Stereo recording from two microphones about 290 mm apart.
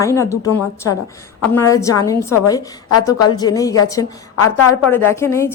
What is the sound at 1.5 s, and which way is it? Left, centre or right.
A woman's voice, centre.